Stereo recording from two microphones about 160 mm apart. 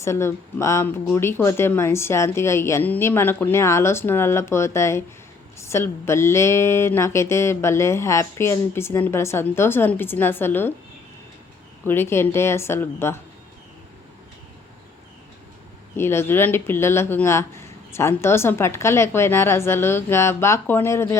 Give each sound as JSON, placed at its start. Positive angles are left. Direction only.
{"t": 0.0, "sound": "speech", "side_deg": 15}
{"t": 11.9, "sound": "speech", "side_deg": 15}
{"t": 16.0, "sound": "speech", "side_deg": 15}